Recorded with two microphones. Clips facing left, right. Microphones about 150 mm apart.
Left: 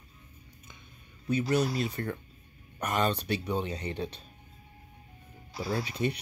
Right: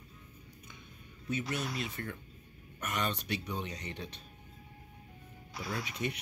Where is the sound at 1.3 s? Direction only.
35° left (ahead or behind).